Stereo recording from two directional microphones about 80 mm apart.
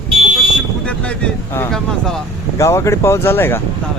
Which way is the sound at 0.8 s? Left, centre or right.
Centre.